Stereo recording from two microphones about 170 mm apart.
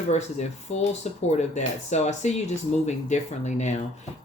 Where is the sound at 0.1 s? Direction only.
45° left (ahead or behind).